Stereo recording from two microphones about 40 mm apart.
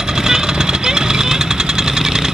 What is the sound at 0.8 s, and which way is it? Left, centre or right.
Vehicle, centre.